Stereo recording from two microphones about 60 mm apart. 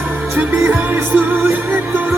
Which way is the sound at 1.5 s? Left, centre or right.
Right.